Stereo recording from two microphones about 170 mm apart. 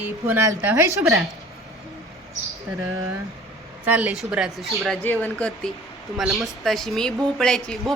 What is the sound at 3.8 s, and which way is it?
Speech, 10° right (ahead or behind).